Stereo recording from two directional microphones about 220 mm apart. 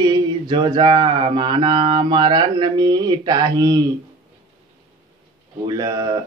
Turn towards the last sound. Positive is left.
turn(degrees=-20)  # may be behind; listen again after turning